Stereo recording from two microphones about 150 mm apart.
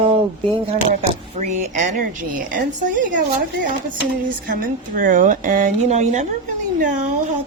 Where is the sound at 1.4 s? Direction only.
55° right (ahead or behind).